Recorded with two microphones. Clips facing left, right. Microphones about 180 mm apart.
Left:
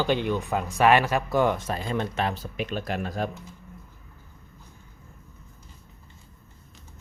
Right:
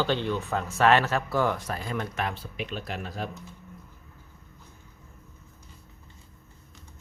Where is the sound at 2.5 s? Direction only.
50° left (ahead or behind).